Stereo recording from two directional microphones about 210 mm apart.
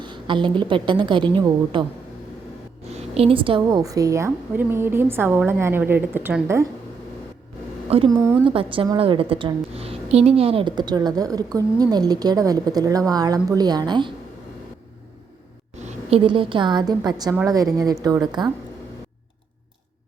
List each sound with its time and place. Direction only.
0.0 s a woman's voice: 20° right (ahead or behind)
2.9 s a woman's voice: 25° right (ahead or behind); by 6.7 s 10° right (ahead or behind)
7.9 s a woman's voice: 25° right (ahead or behind)
16.0 s a woman's voice: 25° right (ahead or behind)